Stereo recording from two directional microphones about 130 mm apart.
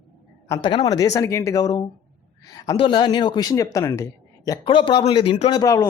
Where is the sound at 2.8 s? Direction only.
35° left (ahead or behind).